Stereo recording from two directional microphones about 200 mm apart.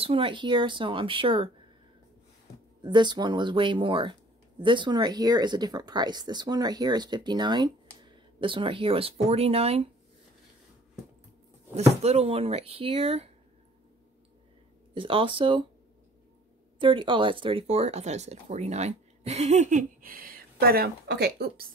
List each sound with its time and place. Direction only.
0.0 s speech: 25° right (ahead or behind)
2.8 s speech: 20° right (ahead or behind)
11.7 s speech: 30° right (ahead or behind)
15.0 s speech: 25° right (ahead or behind)
16.8 s speech: 25° right (ahead or behind); by 21.6 s 55° right (ahead or behind)